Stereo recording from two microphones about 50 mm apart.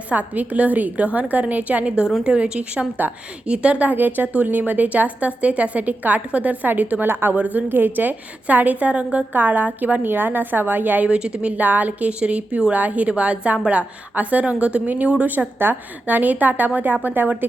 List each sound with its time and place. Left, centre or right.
0.1 s a woman's voice: right
3.9 s a woman's voice: right
7.3 s a woman's voice: right
11.1 s a woman's voice: right
15.5 s a woman's voice: right